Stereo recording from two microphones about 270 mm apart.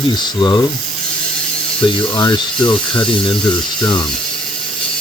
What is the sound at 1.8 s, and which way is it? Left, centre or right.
Speech, centre.